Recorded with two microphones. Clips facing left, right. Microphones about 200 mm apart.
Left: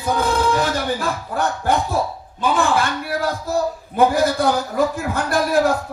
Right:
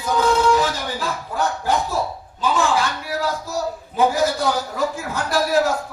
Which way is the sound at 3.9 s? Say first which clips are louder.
Left 2 dB; 55° left (ahead or behind).